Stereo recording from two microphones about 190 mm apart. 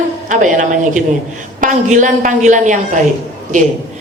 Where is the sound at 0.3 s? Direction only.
40° right (ahead or behind).